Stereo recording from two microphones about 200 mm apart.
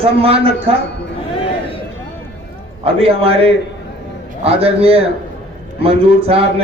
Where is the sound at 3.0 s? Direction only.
30° right (ahead or behind).